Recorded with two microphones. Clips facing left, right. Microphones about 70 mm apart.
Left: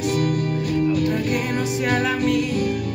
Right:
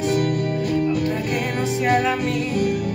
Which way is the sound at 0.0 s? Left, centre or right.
Right.